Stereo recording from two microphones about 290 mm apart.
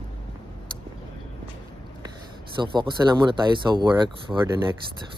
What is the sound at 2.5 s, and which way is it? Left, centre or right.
Speech, centre.